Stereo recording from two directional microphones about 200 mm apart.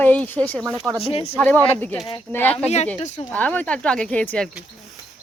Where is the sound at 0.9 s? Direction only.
30° left (ahead or behind).